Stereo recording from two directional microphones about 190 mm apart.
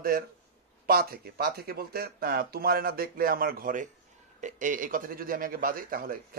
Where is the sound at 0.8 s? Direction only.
50° right (ahead or behind).